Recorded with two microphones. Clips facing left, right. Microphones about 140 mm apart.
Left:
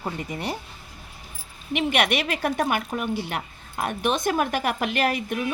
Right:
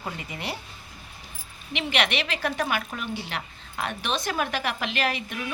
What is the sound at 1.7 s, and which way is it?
Speech, 50° left (ahead or behind).